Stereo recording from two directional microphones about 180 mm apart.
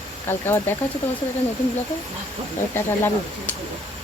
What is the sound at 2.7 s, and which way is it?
Speech, 15° left (ahead or behind).